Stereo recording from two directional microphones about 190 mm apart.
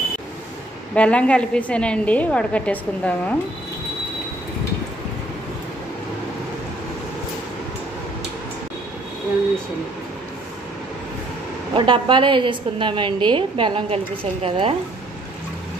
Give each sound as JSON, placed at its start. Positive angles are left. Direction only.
{"t": 0.9, "sound": "a woman's voice", "side_deg": 5}
{"t": 11.7, "sound": "a woman's voice", "side_deg": -25}